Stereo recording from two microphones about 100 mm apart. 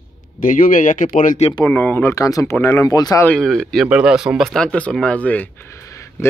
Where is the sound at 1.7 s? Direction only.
15° left (ahead or behind).